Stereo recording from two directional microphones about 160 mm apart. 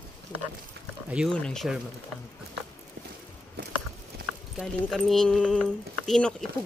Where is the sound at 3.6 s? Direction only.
90° right.